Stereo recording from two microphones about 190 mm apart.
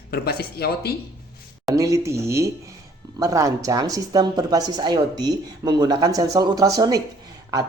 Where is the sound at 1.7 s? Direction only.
15° right (ahead or behind).